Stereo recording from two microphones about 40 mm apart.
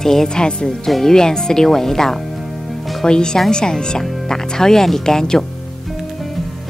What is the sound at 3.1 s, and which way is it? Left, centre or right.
Speech, centre.